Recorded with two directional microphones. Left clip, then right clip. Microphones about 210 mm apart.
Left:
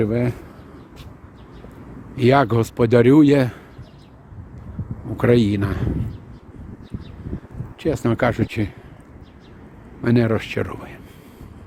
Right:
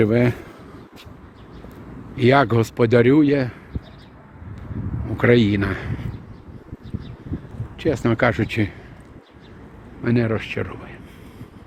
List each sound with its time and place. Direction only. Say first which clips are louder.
0.0 s speech: right 4 dB; 10° right (ahead or behind)
2.1 s a man's voice: even; 15° left (ahead or behind)
5.1 s a man's voice: right 1 dB; 10° left (ahead or behind)
7.8 s a man's voice: right 1 dB; 10° left (ahead or behind)
10.0 s speech: left 2 dB; 25° left (ahead or behind)